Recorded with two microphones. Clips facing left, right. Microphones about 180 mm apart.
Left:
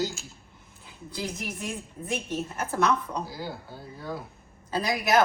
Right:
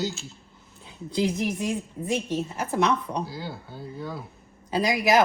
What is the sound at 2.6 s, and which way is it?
Speech, 15° right (ahead or behind).